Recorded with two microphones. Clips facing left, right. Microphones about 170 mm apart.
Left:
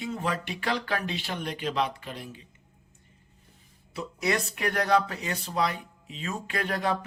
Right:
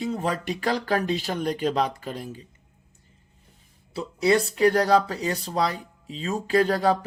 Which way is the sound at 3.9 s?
30° right (ahead or behind).